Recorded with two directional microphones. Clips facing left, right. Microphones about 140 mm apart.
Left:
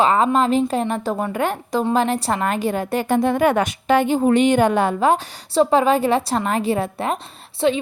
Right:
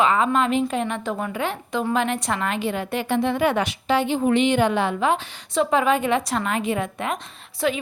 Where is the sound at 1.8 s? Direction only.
30° left (ahead or behind).